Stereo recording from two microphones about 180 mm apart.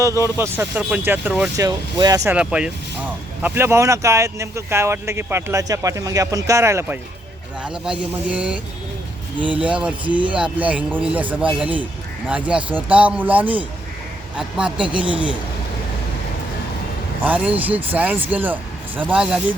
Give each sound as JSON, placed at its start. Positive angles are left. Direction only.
{"t": 0.2, "sound": "speech", "side_deg": -15}
{"t": 1.6, "sound": "speech", "side_deg": -20}
{"t": 2.3, "sound": "speech", "side_deg": -5}
{"t": 17.2, "sound": "speech", "side_deg": -10}